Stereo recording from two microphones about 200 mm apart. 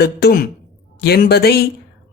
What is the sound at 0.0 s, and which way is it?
Speech, 55° left (ahead or behind).